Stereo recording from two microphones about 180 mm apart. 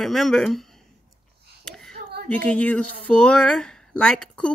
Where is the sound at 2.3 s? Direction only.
5° left (ahead or behind).